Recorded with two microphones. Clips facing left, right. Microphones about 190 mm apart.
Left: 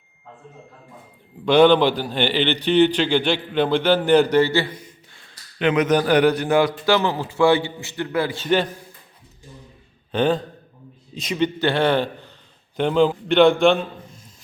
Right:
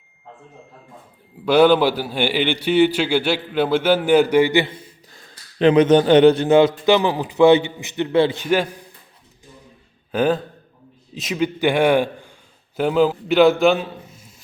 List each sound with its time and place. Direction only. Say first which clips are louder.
1.5 s a man's voice: even; 5° right (ahead or behind)
5.1 s speech: right 7 dB; 35° right (ahead or behind)
8.4 s a man's voice: right 1 dB; 10° right (ahead or behind)
10.1 s a man's voice: right 1 dB; 5° right (ahead or behind)